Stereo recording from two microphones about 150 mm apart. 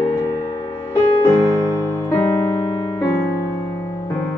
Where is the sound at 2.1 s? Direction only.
15° left (ahead or behind).